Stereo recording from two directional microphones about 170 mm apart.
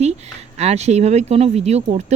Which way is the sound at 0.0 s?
40° right (ahead or behind).